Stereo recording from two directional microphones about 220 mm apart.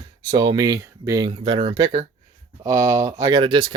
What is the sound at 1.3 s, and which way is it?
Speech, 25° right (ahead or behind).